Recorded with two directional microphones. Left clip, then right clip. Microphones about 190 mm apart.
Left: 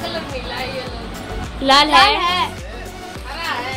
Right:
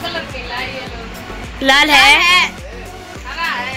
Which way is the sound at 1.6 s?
5° right (ahead or behind).